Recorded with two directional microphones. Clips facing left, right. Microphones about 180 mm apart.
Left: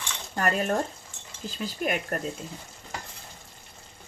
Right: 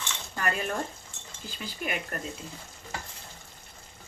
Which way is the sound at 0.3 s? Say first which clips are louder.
Left 5 dB; 40° left (ahead or behind).